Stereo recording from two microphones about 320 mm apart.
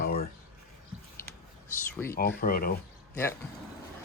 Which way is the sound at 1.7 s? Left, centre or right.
Centre.